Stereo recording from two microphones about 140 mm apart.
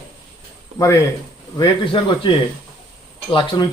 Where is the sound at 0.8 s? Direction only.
20° left (ahead or behind).